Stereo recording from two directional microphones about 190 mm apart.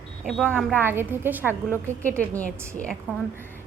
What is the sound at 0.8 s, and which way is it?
Speech, 10° right (ahead or behind).